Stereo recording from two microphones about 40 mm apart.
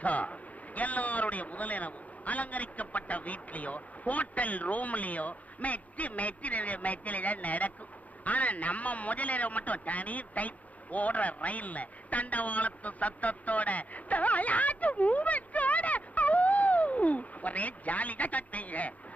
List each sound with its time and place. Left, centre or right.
0.0 s a man's voice: left